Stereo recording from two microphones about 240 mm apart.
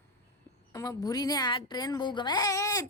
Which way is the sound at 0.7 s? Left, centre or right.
Centre.